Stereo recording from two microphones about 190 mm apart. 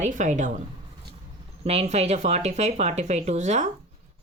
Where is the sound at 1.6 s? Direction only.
35° right (ahead or behind).